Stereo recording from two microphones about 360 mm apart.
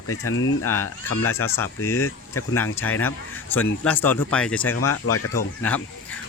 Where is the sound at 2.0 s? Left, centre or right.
Left.